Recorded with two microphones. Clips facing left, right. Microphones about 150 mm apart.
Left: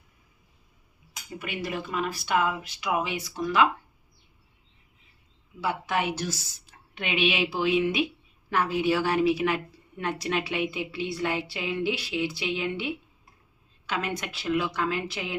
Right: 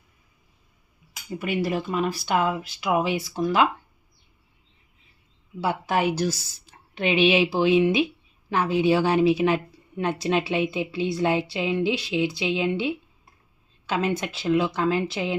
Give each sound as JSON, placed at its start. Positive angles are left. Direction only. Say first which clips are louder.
{"t": 1.4, "sound": "a woman's voice", "louder": "right 7 dB", "side_deg": -35}
{"t": 5.5, "sound": "a woman's voice", "louder": "right 4 dB", "side_deg": -30}